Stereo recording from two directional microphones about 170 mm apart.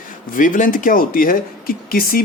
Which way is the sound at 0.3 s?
50° left (ahead or behind).